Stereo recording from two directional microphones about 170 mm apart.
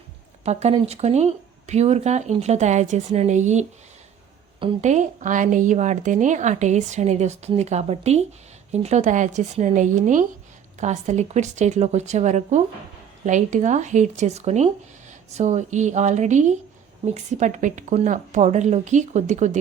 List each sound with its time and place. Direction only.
0.4 s speech: 40° right (ahead or behind)
4.8 s a woman's voice: 45° right (ahead or behind)